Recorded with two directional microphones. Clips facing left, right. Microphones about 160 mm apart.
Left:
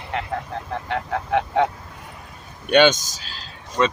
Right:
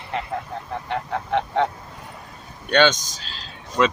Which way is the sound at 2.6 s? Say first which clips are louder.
Left 3 dB; 10° left (ahead or behind).